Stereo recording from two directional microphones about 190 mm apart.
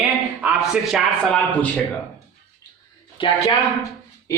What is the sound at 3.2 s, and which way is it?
Speech, 25° left (ahead or behind).